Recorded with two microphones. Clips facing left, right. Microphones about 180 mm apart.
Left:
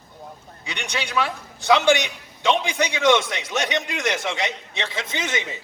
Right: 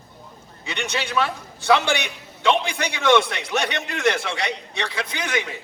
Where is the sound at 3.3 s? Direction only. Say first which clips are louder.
Even; 60° right (ahead or behind).